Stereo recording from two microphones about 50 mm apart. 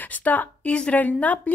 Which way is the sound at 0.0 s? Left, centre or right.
Left.